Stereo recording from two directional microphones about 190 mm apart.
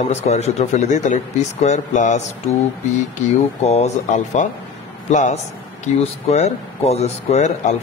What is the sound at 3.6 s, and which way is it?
A man's voice, 35° left (ahead or behind).